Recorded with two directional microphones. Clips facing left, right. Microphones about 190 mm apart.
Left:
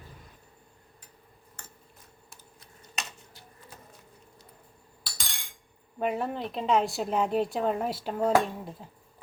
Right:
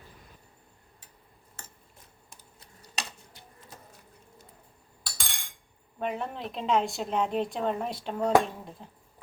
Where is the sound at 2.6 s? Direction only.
35° right (ahead or behind).